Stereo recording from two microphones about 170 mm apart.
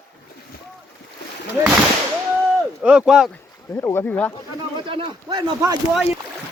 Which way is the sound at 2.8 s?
5° right (ahead or behind).